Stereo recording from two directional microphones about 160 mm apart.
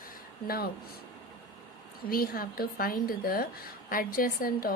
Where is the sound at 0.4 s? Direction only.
75° left (ahead or behind).